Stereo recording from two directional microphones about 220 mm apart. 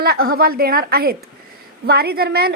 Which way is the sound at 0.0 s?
45° right (ahead or behind).